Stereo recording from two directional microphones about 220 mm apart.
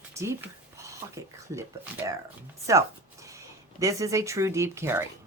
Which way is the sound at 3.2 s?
15° right (ahead or behind).